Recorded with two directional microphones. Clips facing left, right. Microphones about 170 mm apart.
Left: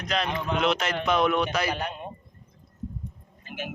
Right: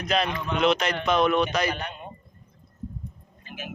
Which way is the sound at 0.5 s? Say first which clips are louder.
Right 3 dB; 5° left (ahead or behind).